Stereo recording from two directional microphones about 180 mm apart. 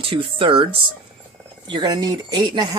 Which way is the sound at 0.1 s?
30° right (ahead or behind).